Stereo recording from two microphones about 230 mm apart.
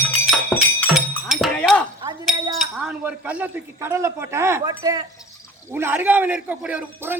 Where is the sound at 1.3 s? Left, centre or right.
Centre.